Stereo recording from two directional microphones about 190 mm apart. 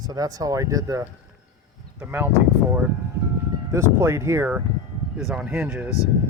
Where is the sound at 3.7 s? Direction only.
15° right (ahead or behind).